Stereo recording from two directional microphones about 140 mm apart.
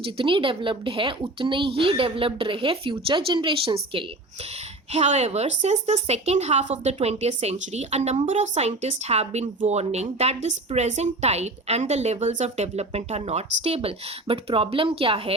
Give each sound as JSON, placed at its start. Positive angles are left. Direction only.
{"t": 0.0, "sound": "a woman's voice", "side_deg": -40}
{"t": 4.9, "sound": "a woman's voice", "side_deg": -50}